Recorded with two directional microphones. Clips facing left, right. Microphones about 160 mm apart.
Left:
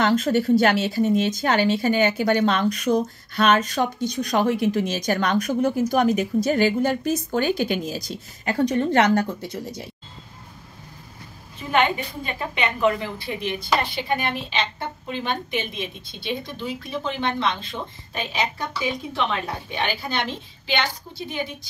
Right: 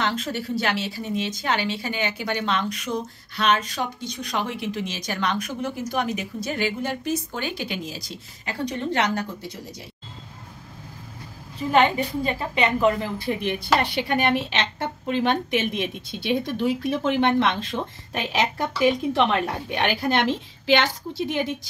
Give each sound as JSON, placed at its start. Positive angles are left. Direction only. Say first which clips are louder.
{"t": 0.0, "sound": "speech", "louder": "left 7 dB", "side_deg": 45}
{"t": 12.3, "sound": "a woman's voice", "louder": "right 1 dB", "side_deg": -35}
{"t": 13.4, "sound": "a woman's voice", "louder": "even", "side_deg": -70}